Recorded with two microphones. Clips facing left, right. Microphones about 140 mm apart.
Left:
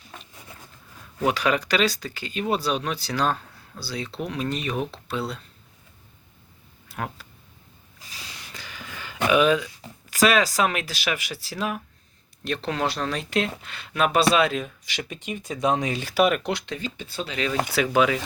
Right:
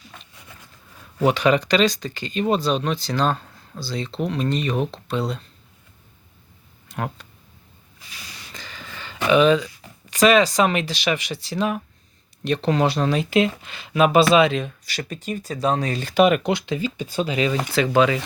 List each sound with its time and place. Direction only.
1.2 s speech: 5° left (ahead or behind)
6.8 s speech: 5° left (ahead or behind)
8.5 s a sound: 10° left (ahead or behind)
10.1 s speech: 5° left (ahead or behind)
14.8 s speech: 15° left (ahead or behind); by 17.6 s 5° right (ahead or behind)
17.9 s speech: 5° left (ahead or behind)